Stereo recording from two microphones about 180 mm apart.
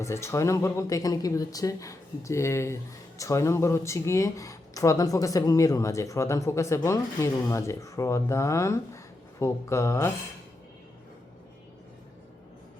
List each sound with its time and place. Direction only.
0.0 s speech: 15° left (ahead or behind)